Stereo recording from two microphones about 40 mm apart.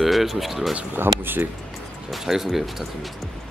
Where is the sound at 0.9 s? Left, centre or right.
Right.